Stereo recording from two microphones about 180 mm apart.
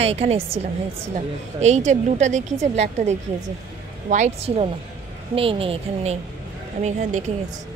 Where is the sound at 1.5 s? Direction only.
40° right (ahead or behind).